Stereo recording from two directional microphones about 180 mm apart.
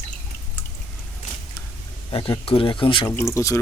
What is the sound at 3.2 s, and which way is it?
Speech, 15° left (ahead or behind).